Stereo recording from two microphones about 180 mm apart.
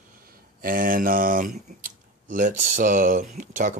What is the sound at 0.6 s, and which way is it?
Speech, 50° right (ahead or behind).